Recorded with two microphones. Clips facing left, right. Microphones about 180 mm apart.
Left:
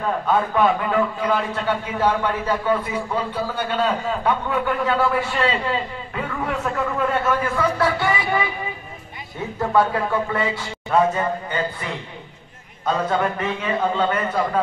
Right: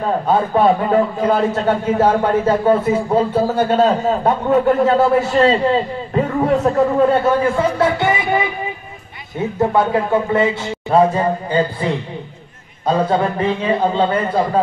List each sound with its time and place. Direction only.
0.0 s a man's voice: 35° right (ahead or behind)
9.6 s speech: 25° right (ahead or behind)